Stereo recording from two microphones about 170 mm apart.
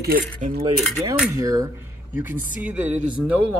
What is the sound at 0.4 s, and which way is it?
Cutlery, 35° right (ahead or behind).